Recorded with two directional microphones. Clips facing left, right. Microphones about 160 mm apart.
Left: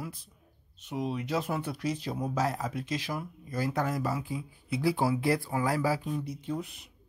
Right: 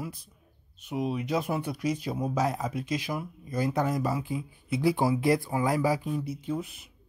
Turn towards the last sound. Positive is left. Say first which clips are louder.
# right 2 dB
turn(degrees=-5)  # may be behind; listen again after turning